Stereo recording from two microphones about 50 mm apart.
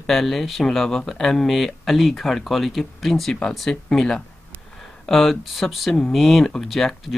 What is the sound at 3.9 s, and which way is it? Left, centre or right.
Speech, centre.